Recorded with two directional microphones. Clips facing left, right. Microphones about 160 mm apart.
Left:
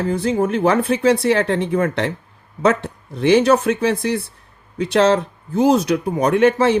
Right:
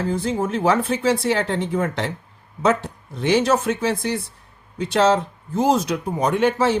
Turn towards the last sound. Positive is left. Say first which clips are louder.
# left 4 dB
turn(degrees=70)  # may be behind; listen again after turning